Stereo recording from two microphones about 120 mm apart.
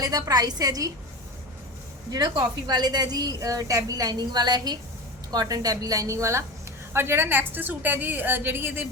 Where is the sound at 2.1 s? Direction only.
35° right (ahead or behind).